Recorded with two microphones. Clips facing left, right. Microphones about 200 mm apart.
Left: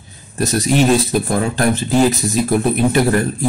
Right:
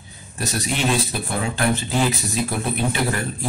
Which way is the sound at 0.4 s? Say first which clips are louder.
Left 9 dB; 40° left (ahead or behind).